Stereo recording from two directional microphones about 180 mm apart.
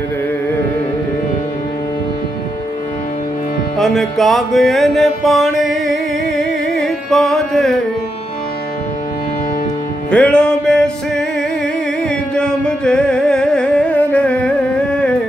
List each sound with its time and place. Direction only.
3.7 s music: centre (ahead or behind)
10.1 s music: 5° left (ahead or behind)
12.4 s music: 5° left (ahead or behind)